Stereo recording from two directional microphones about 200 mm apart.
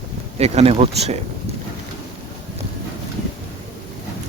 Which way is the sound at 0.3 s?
30° right (ahead or behind).